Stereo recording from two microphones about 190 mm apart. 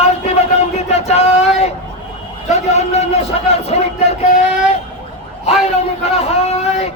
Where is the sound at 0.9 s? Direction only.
35° left (ahead or behind).